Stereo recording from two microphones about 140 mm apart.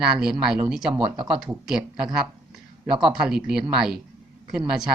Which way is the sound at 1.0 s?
40° right (ahead or behind).